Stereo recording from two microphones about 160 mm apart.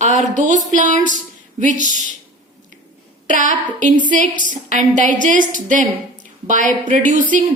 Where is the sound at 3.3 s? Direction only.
50° right (ahead or behind).